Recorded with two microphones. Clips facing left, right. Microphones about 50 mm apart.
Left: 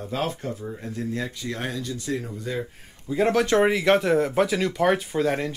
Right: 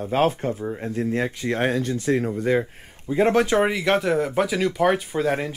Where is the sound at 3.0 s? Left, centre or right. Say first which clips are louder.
Right 3 dB; right.